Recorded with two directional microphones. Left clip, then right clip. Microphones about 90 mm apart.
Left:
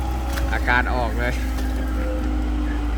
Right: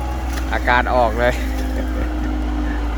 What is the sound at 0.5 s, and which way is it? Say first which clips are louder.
Speech: right 5 dB; 15° right (ahead or behind).